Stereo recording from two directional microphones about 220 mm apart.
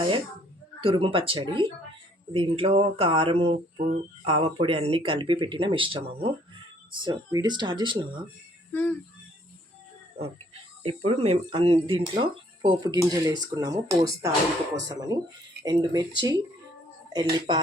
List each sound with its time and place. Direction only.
0.8 s speech: 25° right (ahead or behind)
8.7 s speech: 10° left (ahead or behind)
10.2 s speech: 25° right (ahead or behind)